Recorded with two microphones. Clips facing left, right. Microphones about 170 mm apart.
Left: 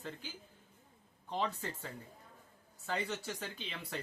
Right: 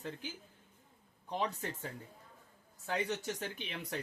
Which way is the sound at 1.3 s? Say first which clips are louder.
Right 1 dB; 15° right (ahead or behind).